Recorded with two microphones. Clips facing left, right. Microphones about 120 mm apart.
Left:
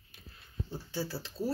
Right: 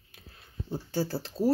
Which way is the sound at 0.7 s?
45° right (ahead or behind).